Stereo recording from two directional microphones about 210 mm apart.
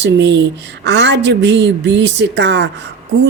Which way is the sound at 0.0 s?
60° right (ahead or behind).